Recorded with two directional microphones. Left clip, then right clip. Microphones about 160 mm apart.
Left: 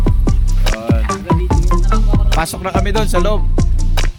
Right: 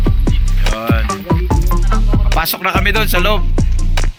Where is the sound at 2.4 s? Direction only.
10° left (ahead or behind).